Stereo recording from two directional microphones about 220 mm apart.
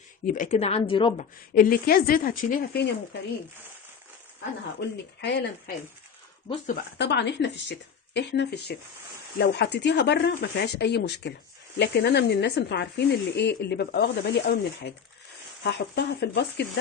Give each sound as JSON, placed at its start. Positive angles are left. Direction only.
{"t": 0.3, "sound": "a woman's voice", "side_deg": 35}
{"t": 4.8, "sound": "speech", "side_deg": 50}
{"t": 7.0, "sound": "speech", "side_deg": 50}